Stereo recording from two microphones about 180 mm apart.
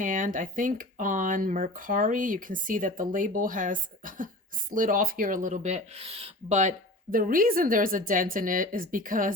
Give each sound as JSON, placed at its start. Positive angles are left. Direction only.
{"t": 0.0, "sound": "speech", "side_deg": -45}